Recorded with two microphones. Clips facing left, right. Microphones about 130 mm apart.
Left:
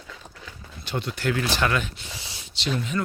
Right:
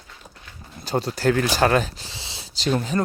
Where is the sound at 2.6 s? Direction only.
40° right (ahead or behind).